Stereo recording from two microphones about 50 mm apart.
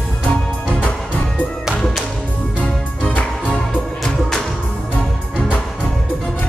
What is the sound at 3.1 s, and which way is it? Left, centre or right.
Music, left.